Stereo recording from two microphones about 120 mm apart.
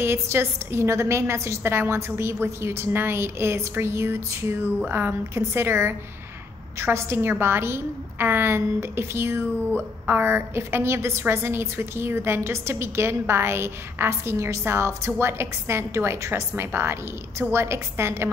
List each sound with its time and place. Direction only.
0.0 s a woman's voice: 20° right (ahead or behind)